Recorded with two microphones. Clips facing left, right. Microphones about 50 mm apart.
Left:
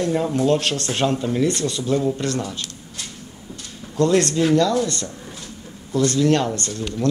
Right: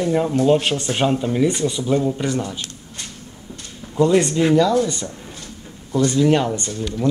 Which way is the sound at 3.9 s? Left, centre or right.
Centre.